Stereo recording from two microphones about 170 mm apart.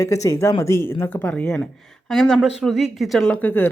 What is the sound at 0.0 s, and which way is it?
Speech, 20° left (ahead or behind).